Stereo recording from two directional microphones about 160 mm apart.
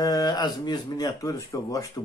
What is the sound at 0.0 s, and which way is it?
Speech, 25° left (ahead or behind).